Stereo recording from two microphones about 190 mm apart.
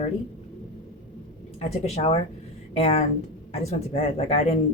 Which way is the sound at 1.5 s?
35° left (ahead or behind).